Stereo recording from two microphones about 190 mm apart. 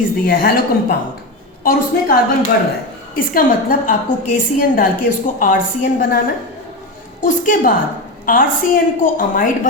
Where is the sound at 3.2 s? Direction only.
50° left (ahead or behind).